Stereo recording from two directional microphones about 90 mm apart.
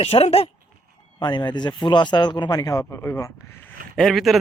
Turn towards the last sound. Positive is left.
turn(degrees=0)  # may be behind; listen again after turning